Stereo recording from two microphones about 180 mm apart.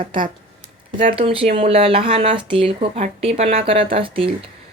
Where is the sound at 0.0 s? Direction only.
25° right (ahead or behind).